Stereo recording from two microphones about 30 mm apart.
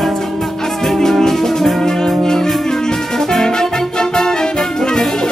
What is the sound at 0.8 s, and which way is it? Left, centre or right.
Music, centre.